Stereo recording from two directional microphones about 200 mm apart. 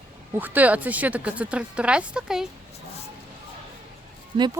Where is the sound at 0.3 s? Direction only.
10° right (ahead or behind).